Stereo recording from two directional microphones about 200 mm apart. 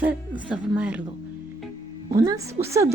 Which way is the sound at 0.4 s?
5° right (ahead or behind).